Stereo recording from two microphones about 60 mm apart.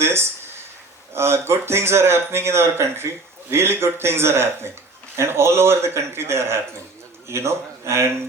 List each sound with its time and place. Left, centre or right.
0.0 s speech: right